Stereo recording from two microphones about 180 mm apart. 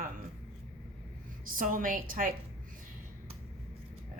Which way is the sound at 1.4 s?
50° right (ahead or behind).